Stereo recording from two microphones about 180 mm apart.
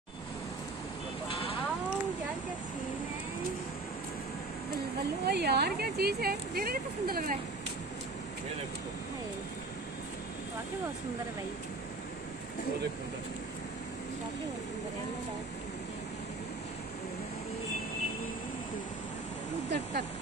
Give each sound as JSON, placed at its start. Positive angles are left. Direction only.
{"t": 5.2, "sound": "speech", "side_deg": -65}